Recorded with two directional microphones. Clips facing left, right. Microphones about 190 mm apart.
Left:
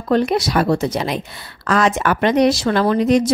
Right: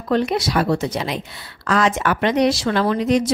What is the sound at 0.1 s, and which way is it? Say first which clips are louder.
A woman's voice: left 3 dB; 45° left (ahead or behind).